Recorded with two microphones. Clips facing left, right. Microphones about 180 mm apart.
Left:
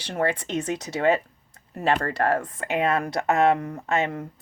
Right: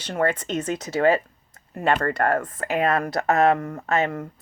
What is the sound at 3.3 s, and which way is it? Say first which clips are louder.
Speech: right 1 dB; 50° right (ahead or behind).